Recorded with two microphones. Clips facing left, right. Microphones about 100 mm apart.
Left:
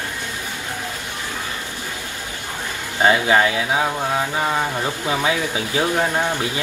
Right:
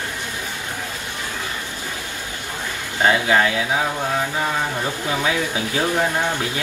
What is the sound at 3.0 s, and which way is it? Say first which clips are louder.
Speech: left 1 dB; 25° left (ahead or behind).